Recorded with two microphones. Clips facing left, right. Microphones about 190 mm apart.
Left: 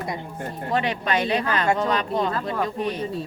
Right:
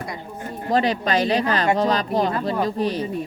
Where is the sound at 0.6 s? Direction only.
35° right (ahead or behind).